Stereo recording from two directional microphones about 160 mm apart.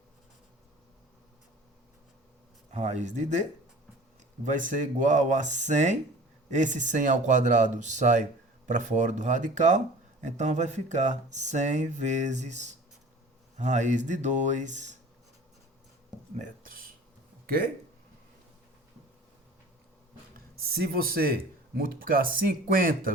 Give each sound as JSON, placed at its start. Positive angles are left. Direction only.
{"t": 2.7, "sound": "speech", "side_deg": -45}
{"t": 4.4, "sound": "speech", "side_deg": -55}
{"t": 16.4, "sound": "speech", "side_deg": -60}
{"t": 20.3, "sound": "speech", "side_deg": -70}